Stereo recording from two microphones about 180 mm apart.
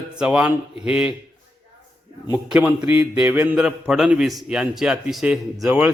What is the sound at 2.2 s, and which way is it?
Music, 5° right (ahead or behind).